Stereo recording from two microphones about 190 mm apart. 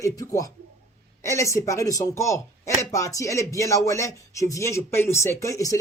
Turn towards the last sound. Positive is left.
turn(degrees=15)  # may be behind; listen again after turning